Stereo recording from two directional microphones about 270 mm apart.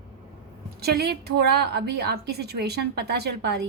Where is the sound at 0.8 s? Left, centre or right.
Right.